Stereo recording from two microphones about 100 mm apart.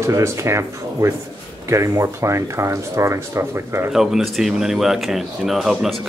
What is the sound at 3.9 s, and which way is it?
Speech, 5° right (ahead or behind).